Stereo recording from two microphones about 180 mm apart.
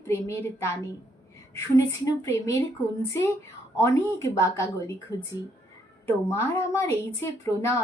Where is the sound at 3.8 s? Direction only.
15° left (ahead or behind).